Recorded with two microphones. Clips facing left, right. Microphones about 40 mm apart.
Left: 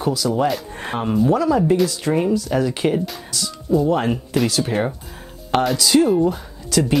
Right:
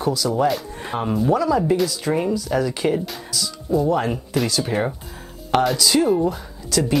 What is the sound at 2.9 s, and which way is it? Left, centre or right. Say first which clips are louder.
Speech: left 2 dB; centre.